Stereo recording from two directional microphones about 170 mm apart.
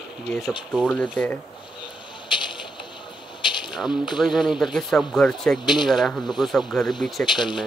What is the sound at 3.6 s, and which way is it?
Speech, centre (ahead or behind).